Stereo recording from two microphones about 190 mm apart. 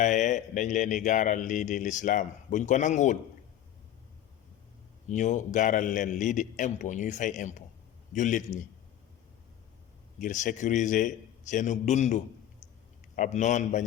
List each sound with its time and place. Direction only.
0.0 s speech: 40° left (ahead or behind)
5.0 s speech: 40° left (ahead or behind)
10.2 s a man's voice: 40° left (ahead or behind)